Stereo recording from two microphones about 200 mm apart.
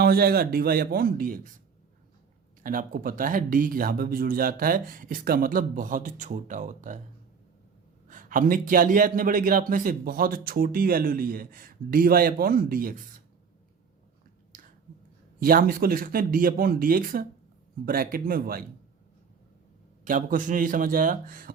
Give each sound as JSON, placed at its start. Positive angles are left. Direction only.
{"t": 0.0, "sound": "a man's voice", "side_deg": -50}
{"t": 2.6, "sound": "a man's voice", "side_deg": -45}
{"t": 8.0, "sound": "a man's voice", "side_deg": -45}
{"t": 14.5, "sound": "a sound", "side_deg": -45}
{"t": 15.4, "sound": "a man's voice", "side_deg": -45}
{"t": 20.1, "sound": "a man's voice", "side_deg": -40}